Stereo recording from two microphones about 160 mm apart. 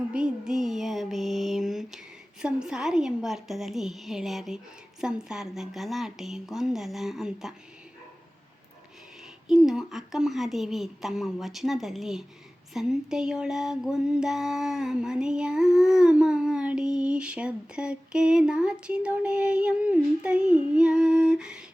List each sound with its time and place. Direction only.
0.1 s mantra: 5° right (ahead or behind)
2.4 s female singing: 5° right (ahead or behind)
9.5 s female singing: 5° right (ahead or behind)